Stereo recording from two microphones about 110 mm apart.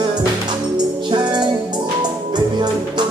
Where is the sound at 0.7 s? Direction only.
45° right (ahead or behind).